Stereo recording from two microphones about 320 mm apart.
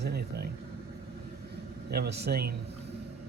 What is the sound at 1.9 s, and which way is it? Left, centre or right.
Speech, right.